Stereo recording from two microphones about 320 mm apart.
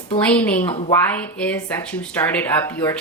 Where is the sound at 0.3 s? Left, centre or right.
Centre.